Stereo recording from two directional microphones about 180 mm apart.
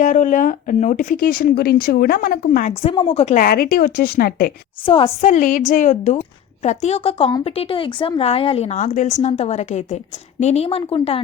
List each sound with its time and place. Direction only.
0.0 s speech: 45° left (ahead or behind)
4.9 s a woman's voice: 30° left (ahead or behind)